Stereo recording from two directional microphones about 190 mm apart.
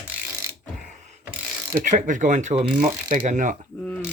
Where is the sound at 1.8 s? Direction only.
40° right (ahead or behind).